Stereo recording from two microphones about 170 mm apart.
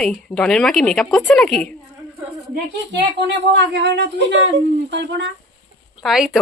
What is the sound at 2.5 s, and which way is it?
A woman's voice, 85° right.